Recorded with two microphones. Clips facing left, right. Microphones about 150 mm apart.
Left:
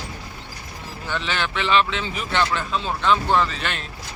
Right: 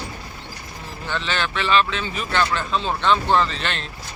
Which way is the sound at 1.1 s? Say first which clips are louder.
Right 1 dB; 15° left (ahead or behind).